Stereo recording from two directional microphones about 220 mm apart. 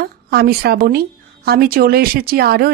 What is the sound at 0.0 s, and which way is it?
Speech, 45° right (ahead or behind).